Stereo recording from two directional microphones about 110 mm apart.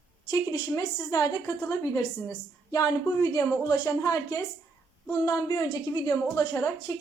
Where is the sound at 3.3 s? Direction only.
30° left (ahead or behind).